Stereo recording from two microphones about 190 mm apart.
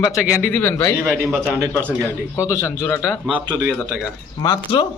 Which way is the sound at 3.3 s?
25° right (ahead or behind).